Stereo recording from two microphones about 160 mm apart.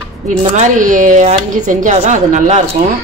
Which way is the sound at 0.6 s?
50° right (ahead or behind).